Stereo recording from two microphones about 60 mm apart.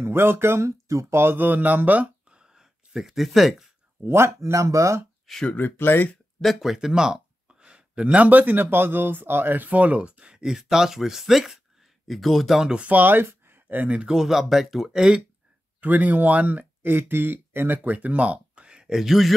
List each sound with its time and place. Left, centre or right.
0.0 s speech: right
1.1 s speech: right
2.3 s a sound: centre
4.0 s speech: right
5.2 s a sound: centre
5.5 s speech: left
6.4 s speech: centre
12.6 s speech: centre
13.5 s a sound: right
14.0 s speech: centre
15.8 s speech: right
17.8 s speech: right; by 19.3 s centre